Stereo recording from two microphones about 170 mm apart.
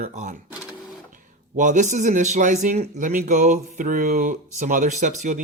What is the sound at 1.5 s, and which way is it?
Speech, 45° right (ahead or behind).